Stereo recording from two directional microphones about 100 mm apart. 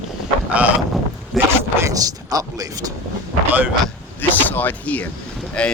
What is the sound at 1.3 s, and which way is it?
Speech, centre (ahead or behind).